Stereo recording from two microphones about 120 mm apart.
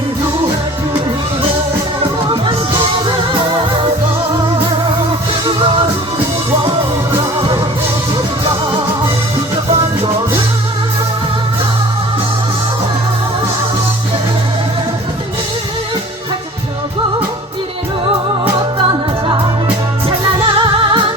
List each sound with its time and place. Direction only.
5.5 s music: 45° right (ahead or behind)
18.0 s music: 45° right (ahead or behind)
20.1 s music: 45° right (ahead or behind)